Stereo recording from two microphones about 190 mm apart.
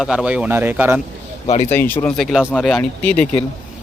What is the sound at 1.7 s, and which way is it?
Speech, 10° left (ahead or behind).